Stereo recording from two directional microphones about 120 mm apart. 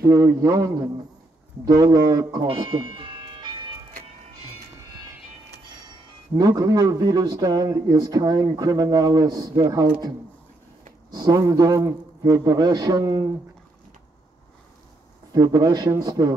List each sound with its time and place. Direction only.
0.0 s a man's voice: 25° right (ahead or behind)
1.7 s speech: 30° right (ahead or behind)
2.4 s ice cream truck: 45° right (ahead or behind)
6.3 s speech: 30° right (ahead or behind)
15.3 s speech: 30° right (ahead or behind)